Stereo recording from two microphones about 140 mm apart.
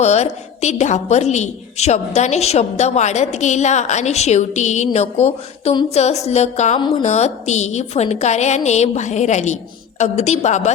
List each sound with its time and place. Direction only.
0.0 s a woman's voice: 55° left (ahead or behind)
6.7 s a woman's voice: 35° left (ahead or behind)
7.0 s a woman's voice: 55° left (ahead or behind)